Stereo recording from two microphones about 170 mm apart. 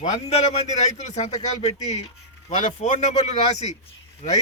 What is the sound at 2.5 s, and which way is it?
Speech, 45° left (ahead or behind).